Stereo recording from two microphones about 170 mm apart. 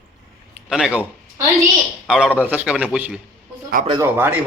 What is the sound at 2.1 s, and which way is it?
A man's voice, 5° right (ahead or behind).